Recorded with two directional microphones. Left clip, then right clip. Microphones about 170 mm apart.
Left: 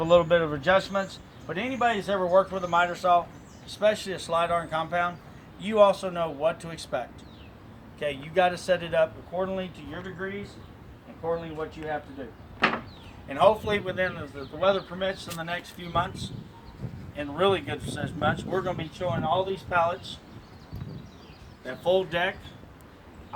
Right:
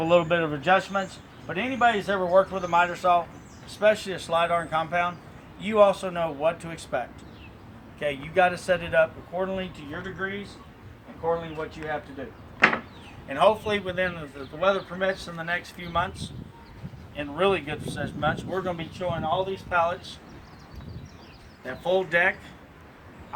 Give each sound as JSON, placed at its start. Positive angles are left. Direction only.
{"t": 0.0, "sound": "a man's voice", "side_deg": 30}
{"t": 11.3, "sound": "speech", "side_deg": -20}
{"t": 12.5, "sound": "a sound", "side_deg": -35}
{"t": 13.2, "sound": "a man's voice", "side_deg": -5}
{"t": 21.8, "sound": "speech", "side_deg": -30}